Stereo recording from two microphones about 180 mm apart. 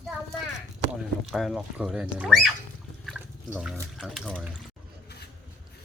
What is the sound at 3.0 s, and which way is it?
Water, 5° right (ahead or behind).